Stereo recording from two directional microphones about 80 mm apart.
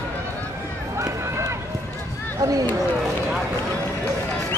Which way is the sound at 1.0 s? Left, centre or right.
Right.